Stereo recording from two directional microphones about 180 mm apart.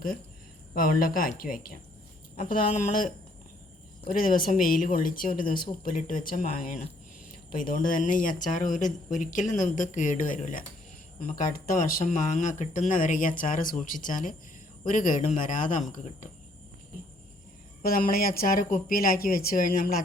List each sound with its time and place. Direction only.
0.7 s speech: 50° left (ahead or behind)
4.1 s speech: 50° left (ahead or behind)
17.8 s speech: 55° left (ahead or behind)